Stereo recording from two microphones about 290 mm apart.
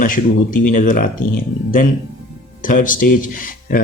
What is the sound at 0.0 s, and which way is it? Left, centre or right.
Speech, left.